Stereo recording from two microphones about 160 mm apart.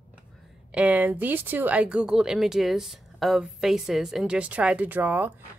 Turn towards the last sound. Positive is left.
turn(degrees=-10)  # may be behind; listen again after turning